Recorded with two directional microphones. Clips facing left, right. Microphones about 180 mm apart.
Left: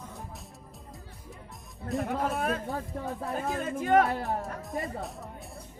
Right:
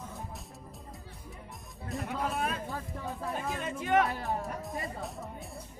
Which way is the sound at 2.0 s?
55° left (ahead or behind).